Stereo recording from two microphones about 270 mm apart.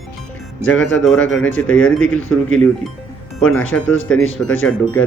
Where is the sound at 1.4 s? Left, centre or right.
Left.